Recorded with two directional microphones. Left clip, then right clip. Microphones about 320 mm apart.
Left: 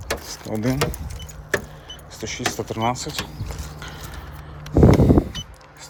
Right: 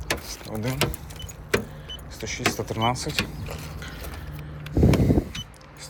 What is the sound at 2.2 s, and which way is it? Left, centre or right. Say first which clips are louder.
Speech: left 1 dB; centre.